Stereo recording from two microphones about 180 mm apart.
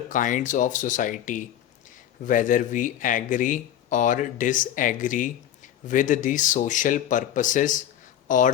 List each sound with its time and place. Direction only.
0.1 s speech: 45° left (ahead or behind)